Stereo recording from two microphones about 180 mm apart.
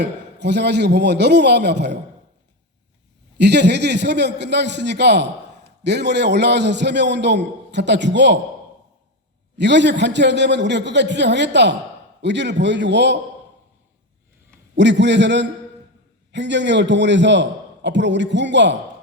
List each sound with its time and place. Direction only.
0.0 s a man's voice: 70° right (ahead or behind)
3.3 s a man's voice: 70° right (ahead or behind)
9.6 s a man's voice: 75° right (ahead or behind)
14.8 s a man's voice: 80° right